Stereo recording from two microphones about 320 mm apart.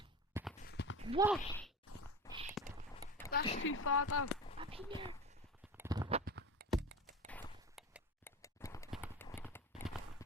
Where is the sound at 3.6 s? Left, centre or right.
Left.